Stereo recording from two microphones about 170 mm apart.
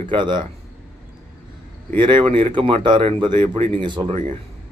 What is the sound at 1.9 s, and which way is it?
Speech, 30° right (ahead or behind).